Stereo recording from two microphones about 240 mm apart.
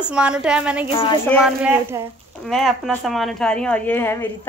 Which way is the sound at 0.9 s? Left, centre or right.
Left.